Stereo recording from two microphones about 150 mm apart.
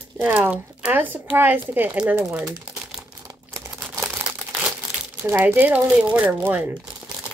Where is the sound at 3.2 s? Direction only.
20° right (ahead or behind).